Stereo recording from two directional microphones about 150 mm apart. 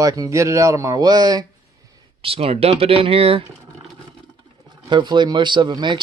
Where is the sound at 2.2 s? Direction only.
40° right (ahead or behind).